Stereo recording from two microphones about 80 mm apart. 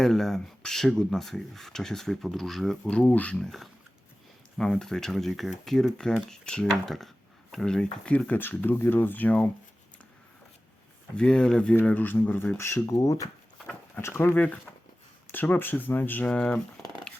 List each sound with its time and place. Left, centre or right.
0.0 s speech: centre
3.0 s speech: centre
3.4 s speech: centre; by 9.5 s left
11.2 s speech: centre
11.8 s speech: left
13.9 s speech: left
16.3 s speech: centre